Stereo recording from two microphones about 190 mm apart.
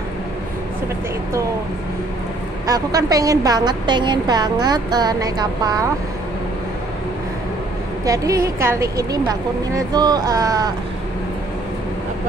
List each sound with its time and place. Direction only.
2.6 s a woman's voice: 20° right (ahead or behind)
8.0 s speech: 15° right (ahead or behind)